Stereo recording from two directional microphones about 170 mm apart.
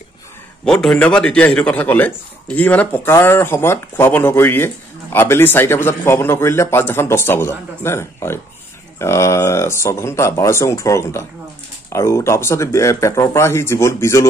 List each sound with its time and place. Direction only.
0.7 s speech: 5° left (ahead or behind)